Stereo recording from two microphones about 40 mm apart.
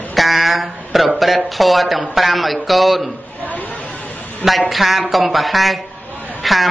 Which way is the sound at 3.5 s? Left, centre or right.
Left.